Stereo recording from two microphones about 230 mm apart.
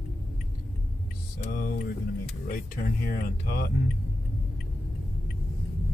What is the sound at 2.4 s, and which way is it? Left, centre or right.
Speech, left.